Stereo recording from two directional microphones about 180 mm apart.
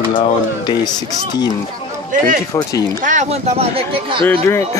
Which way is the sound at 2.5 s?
20° left (ahead or behind).